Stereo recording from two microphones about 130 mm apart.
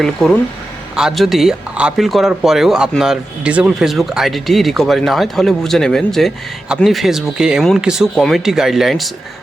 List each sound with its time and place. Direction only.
0.0 s speech: 5° left (ahead or behind)